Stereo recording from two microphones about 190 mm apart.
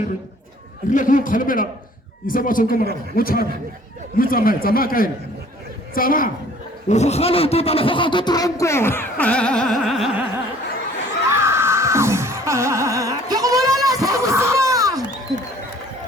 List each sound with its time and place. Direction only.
0.9 s a man's voice: 45° left (ahead or behind)
6.8 s speech: 35° left (ahead or behind); by 10.2 s centre (ahead or behind)
11.3 s music: 15° right (ahead or behind)